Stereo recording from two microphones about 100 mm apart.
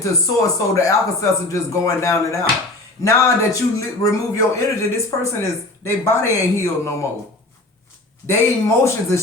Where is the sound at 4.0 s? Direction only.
35° left (ahead or behind).